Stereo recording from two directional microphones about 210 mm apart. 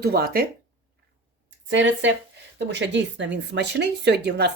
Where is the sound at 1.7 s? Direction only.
60° right (ahead or behind).